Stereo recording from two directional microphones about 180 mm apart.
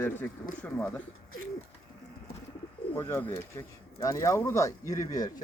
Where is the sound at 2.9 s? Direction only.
15° left (ahead or behind).